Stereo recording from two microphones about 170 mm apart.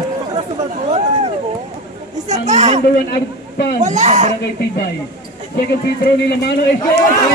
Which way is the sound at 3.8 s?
45° right (ahead or behind).